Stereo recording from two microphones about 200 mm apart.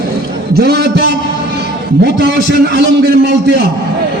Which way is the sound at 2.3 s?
50° right (ahead or behind).